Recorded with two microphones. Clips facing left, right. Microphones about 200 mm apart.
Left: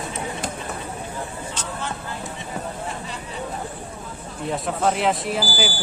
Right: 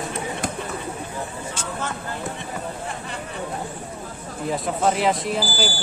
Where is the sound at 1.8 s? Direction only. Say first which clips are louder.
Right 1 dB; 45° right (ahead or behind).